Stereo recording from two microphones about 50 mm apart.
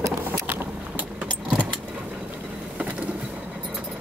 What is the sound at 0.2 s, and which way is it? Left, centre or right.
Vehicle, right.